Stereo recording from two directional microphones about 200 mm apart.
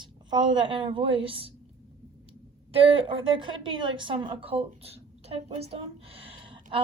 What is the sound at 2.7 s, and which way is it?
A woman's voice, 30° right (ahead or behind).